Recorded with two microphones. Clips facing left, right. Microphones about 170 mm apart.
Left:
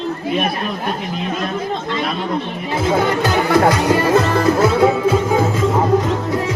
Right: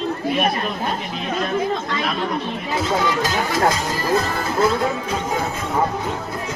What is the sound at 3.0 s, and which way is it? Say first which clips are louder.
Speech: left 4 dB; 60° left (ahead or behind).